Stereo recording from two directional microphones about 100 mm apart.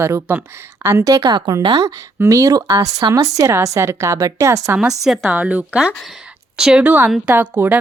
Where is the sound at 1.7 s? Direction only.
35° right (ahead or behind).